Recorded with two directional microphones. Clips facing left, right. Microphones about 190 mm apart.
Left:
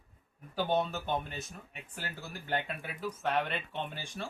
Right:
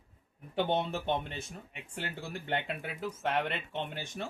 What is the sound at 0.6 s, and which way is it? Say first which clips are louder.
Speech: even; 25° right (ahead or behind).